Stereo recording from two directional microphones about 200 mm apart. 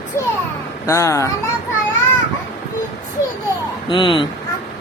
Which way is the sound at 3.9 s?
25° left (ahead or behind).